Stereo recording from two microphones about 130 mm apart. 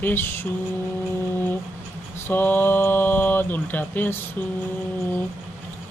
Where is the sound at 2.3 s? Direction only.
15° left (ahead or behind).